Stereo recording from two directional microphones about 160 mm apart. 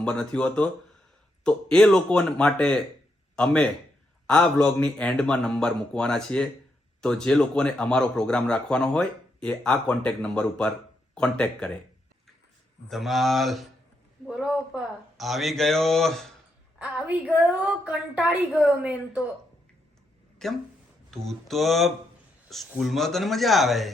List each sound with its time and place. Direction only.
0.0 s speech: 5° left (ahead or behind)
1.7 s a man's voice: 5° left (ahead or behind)
12.9 s a man's voice: centre (ahead or behind)
16.7 s a woman's voice: 10° right (ahead or behind)
20.4 s a man's voice: centre (ahead or behind)